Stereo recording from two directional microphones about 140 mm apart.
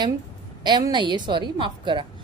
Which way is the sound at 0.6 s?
30° right (ahead or behind).